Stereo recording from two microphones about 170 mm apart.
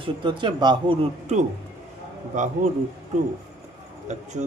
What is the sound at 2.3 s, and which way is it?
Speech, 50° right (ahead or behind).